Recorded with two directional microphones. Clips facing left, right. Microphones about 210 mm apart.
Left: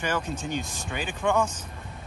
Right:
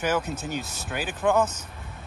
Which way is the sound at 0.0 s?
5° right (ahead or behind).